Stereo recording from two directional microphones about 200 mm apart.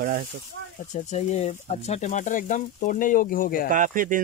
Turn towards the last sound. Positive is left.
turn(degrees=-40)  # may be behind; listen again after turning